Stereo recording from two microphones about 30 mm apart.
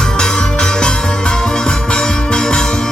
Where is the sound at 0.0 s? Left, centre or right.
Left.